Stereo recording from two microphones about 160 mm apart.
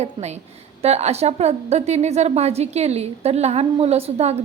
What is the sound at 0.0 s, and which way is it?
A woman's voice, 45° right (ahead or behind).